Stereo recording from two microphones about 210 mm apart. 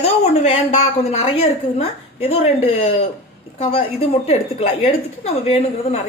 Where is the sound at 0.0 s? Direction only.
30° left (ahead or behind).